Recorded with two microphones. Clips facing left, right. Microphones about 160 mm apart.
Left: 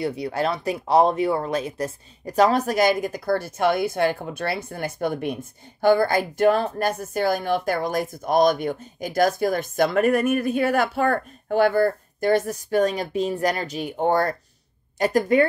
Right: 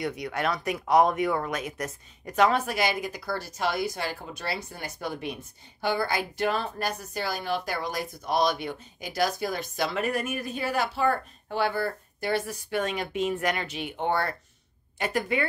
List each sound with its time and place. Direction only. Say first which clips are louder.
0.0 s speech: left 5 dB; 30° left (ahead or behind)